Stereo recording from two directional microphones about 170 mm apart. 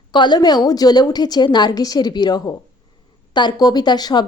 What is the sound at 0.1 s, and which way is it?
A woman's voice, 25° left (ahead or behind).